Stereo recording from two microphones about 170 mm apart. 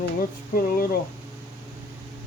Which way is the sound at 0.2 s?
60° left (ahead or behind).